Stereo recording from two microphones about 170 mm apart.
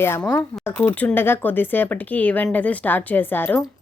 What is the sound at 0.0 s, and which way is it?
Speech, 15° left (ahead or behind).